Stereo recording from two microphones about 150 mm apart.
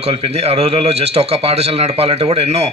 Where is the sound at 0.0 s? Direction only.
40° right (ahead or behind).